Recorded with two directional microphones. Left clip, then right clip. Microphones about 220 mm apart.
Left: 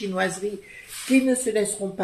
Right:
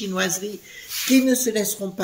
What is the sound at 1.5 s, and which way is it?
Speech, 45° right (ahead or behind).